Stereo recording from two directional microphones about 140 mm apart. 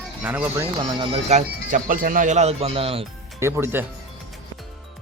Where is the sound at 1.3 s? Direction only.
65° right (ahead or behind); by 3.1 s 40° right (ahead or behind).